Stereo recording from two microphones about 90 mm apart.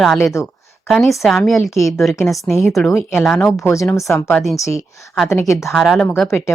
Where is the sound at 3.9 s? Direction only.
35° left (ahead or behind).